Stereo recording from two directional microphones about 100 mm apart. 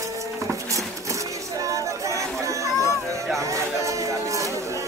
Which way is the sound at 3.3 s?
30° right (ahead or behind).